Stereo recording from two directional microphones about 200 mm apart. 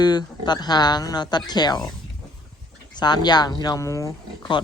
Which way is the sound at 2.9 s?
20° left (ahead or behind).